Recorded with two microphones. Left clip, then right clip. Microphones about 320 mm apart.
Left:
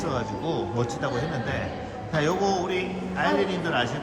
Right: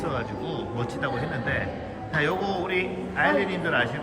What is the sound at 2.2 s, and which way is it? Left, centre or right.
A man's voice, centre.